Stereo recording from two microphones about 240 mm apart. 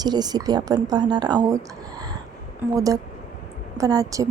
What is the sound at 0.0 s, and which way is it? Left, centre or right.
Speech, centre.